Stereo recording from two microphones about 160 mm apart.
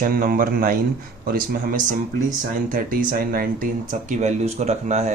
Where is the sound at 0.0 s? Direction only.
65° right (ahead or behind).